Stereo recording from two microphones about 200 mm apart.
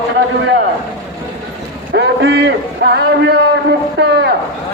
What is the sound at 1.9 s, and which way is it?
A man's voice, 55° right (ahead or behind).